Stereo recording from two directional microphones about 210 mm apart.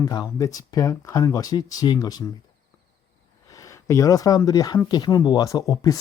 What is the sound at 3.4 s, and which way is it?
Speech, 15° left (ahead or behind).